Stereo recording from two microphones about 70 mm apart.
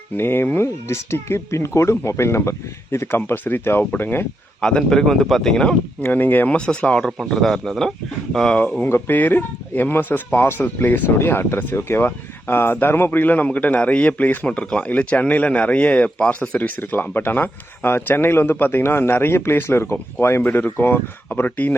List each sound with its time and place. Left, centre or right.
0.2 s speech: left
4.6 s speech: centre
6.0 s speech: left
6.7 s speech: centre
7.2 s speech: centre
8.8 s speech: left
20.4 s speech: left